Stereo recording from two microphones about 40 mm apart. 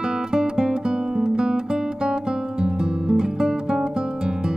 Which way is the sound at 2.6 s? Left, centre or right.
Centre.